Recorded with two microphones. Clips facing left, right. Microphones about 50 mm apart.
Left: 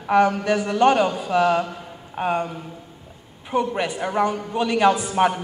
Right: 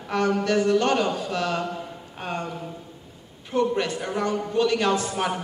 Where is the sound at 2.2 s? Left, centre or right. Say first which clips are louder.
Left 8 dB; centre.